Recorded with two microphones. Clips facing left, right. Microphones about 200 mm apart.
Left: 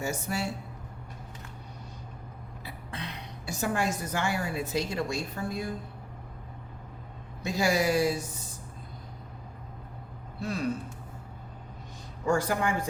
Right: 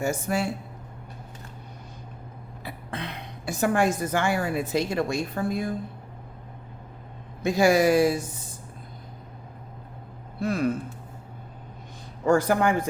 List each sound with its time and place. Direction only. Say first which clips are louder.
0.0 s speech: right 6 dB; 50° right (ahead or behind)
2.6 s a woman's voice: right 5 dB; 55° right (ahead or behind)
7.4 s speech: right 7 dB; 55° right (ahead or behind)
10.4 s speech: right 7 dB; 55° right (ahead or behind)
12.2 s a man's voice: right 6 dB; 60° right (ahead or behind)